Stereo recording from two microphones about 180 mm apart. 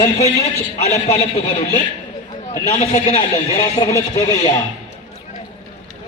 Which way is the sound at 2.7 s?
35° left (ahead or behind).